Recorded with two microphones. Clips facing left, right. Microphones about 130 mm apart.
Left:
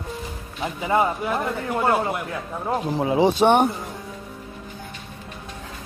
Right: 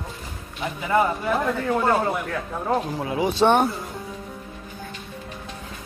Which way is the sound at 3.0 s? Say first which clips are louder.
Left 5 dB; 30° left (ahead or behind).